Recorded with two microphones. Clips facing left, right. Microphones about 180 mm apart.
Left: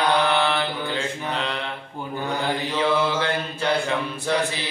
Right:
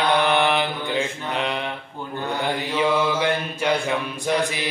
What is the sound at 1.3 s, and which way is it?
Mantra, 15° right (ahead or behind).